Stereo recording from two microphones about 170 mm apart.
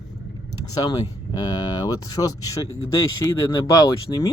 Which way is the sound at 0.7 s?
20° left (ahead or behind).